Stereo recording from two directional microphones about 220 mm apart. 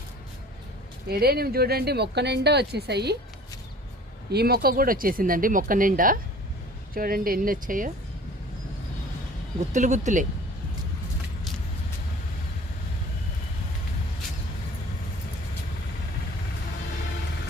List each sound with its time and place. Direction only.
1.0 s speech: 45° right (ahead or behind)
4.3 s speech: 45° right (ahead or behind)
9.7 s speech: 35° right (ahead or behind)